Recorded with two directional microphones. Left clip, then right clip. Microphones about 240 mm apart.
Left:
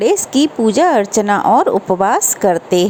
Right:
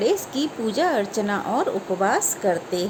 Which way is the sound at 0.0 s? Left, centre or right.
Left.